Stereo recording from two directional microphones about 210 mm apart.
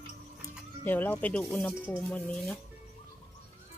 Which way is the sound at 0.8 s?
10° left (ahead or behind).